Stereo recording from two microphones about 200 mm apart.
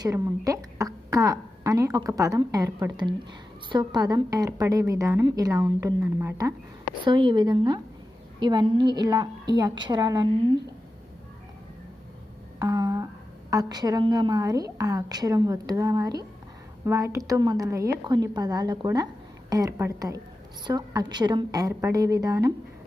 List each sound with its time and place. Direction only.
0.0 s a woman's voice: 15° right (ahead or behind)
12.5 s a sound: 20° right (ahead or behind)
13.5 s a woman's voice: 20° right (ahead or behind)